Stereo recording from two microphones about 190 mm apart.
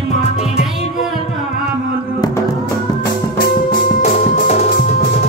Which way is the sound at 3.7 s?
35° left (ahead or behind).